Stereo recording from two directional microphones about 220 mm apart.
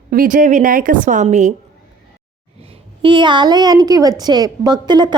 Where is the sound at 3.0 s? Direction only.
20° right (ahead or behind).